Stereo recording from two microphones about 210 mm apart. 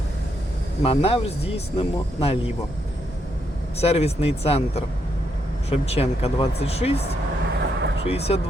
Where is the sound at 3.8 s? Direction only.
30° left (ahead or behind).